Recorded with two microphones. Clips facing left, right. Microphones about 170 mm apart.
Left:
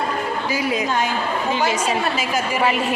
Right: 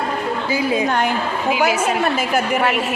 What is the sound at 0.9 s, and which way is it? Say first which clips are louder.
A woman's voice: right 2 dB; 60° right (ahead or behind).